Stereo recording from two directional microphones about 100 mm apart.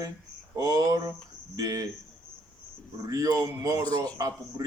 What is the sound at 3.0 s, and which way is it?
Speech, 35° right (ahead or behind).